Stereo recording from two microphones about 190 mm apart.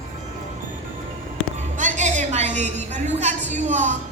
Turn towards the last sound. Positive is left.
turn(degrees=-40)  # may be behind; listen again after turning